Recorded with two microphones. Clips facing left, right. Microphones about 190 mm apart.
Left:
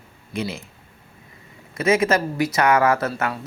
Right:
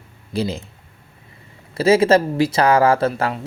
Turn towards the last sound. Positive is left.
turn(degrees=-30)  # may be behind; listen again after turning